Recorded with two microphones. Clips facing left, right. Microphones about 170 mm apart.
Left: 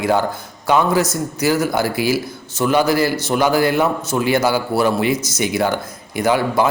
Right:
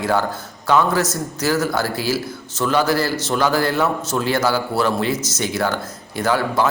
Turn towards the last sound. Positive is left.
turn(degrees=15)  # may be behind; listen again after turning